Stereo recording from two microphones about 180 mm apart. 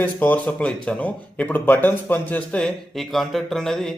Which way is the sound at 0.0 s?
10° left (ahead or behind).